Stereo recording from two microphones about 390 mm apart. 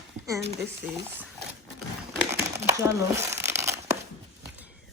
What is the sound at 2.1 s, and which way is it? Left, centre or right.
Crumpling, centre.